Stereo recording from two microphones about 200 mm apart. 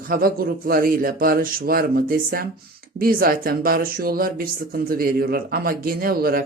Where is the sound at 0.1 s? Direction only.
45° right (ahead or behind).